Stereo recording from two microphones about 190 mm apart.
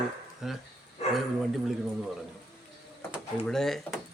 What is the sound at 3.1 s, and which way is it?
Speech, 5° left (ahead or behind).